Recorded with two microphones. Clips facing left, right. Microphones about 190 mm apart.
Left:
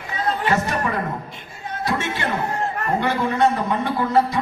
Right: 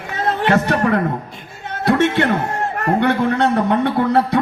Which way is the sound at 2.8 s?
65° right (ahead or behind).